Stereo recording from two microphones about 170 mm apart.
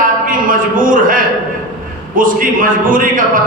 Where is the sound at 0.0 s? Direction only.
55° right (ahead or behind).